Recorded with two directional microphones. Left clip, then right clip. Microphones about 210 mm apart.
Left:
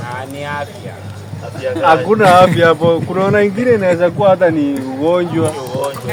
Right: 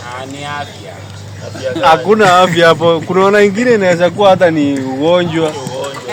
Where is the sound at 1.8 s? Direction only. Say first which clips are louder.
Right 2 dB; 50° right (ahead or behind).